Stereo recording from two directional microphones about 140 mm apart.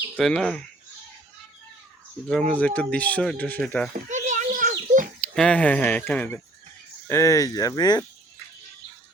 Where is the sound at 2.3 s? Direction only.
5° left (ahead or behind).